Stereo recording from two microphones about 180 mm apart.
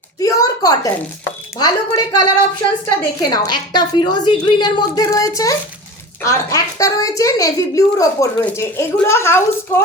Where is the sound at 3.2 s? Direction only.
25° left (ahead or behind).